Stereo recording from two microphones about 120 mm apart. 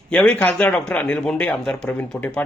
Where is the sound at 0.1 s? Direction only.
15° left (ahead or behind).